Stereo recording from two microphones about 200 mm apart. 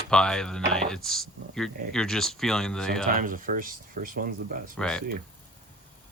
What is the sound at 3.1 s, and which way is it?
Speech, 45° right (ahead or behind).